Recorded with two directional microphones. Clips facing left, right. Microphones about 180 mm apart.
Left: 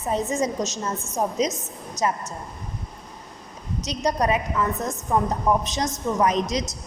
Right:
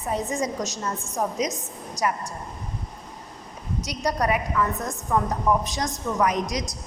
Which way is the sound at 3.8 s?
20° left (ahead or behind).